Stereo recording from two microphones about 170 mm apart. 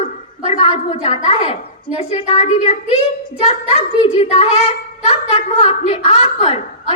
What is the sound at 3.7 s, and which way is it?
A woman's voice, 35° left (ahead or behind).